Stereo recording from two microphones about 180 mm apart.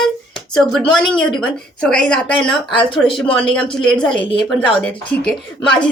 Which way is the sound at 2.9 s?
30° left (ahead or behind).